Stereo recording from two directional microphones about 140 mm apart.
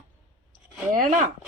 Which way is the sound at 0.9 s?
75° right (ahead or behind).